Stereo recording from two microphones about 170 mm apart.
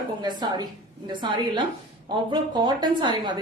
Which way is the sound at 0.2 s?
25° right (ahead or behind).